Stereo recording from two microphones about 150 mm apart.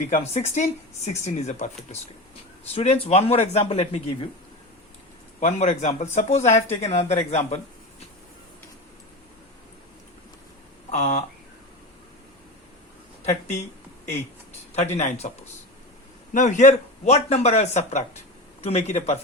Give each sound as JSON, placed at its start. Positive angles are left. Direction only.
{"t": 0.0, "sound": "speech", "side_deg": 50}
{"t": 2.7, "sound": "speech", "side_deg": 45}
{"t": 5.4, "sound": "speech", "side_deg": 50}
{"t": 10.9, "sound": "speech", "side_deg": 50}
{"t": 13.2, "sound": "a sound", "side_deg": 50}
{"t": 14.9, "sound": "speech", "side_deg": 50}
{"t": 16.3, "sound": "speech", "side_deg": 55}